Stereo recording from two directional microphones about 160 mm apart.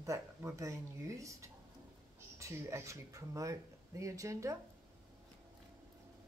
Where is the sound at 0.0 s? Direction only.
20° right (ahead or behind).